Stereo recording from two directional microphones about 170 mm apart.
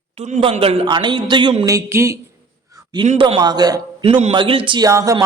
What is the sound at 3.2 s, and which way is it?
Speech, 30° right (ahead or behind).